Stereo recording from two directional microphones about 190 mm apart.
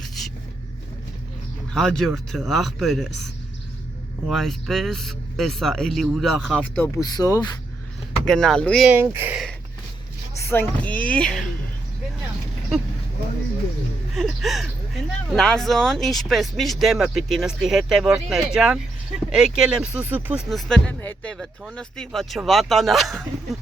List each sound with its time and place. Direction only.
0.0 s vehicle: centre (ahead or behind)
1.7 s speech: centre (ahead or behind)
4.3 s speech: centre (ahead or behind)
7.0 s speech: 20° left (ahead or behind)
8.2 s speech: 5° left (ahead or behind)
8.9 s speech: 10° right (ahead or behind)
10.4 s speech: 10° left (ahead or behind)
14.2 s speech: centre (ahead or behind)